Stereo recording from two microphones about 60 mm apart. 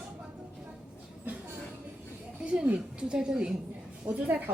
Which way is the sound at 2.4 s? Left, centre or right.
Centre.